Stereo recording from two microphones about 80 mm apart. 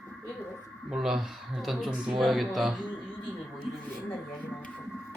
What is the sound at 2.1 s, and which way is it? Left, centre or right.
Speech, centre.